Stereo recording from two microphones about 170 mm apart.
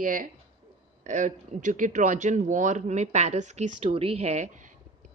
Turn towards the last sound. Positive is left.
turn(degrees=-40)  # may be behind; listen again after turning